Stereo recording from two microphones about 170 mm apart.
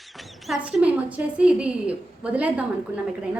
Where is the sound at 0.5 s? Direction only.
5° right (ahead or behind).